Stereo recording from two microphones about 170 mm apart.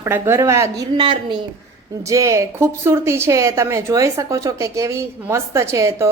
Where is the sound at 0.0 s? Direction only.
15° right (ahead or behind).